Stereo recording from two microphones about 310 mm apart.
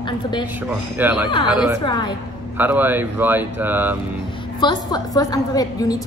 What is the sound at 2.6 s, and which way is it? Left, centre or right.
Speech, centre.